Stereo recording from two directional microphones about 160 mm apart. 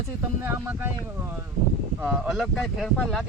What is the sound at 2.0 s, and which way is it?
Speech, 5° right (ahead or behind).